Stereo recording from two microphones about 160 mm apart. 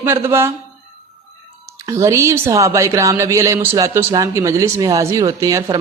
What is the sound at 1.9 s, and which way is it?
A woman's voice, 20° right (ahead or behind).